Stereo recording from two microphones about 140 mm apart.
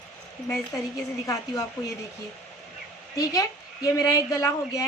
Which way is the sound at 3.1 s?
25° left (ahead or behind).